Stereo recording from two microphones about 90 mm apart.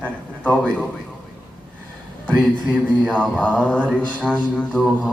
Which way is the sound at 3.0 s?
10° left (ahead or behind).